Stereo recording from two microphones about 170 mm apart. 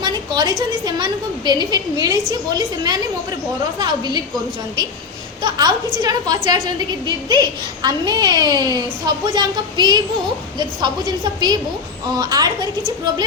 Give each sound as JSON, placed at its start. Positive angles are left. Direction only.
{"t": 0.0, "sound": "a child's voice", "side_deg": -25}
{"t": 5.4, "sound": "a child's voice", "side_deg": -25}